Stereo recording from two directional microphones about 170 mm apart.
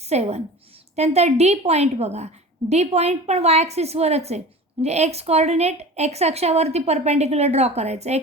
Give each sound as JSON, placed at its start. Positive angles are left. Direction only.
{"t": 0.1, "sound": "a woman's voice", "side_deg": -40}